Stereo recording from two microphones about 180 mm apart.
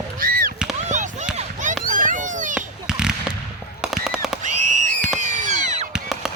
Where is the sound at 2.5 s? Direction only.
5° right (ahead or behind).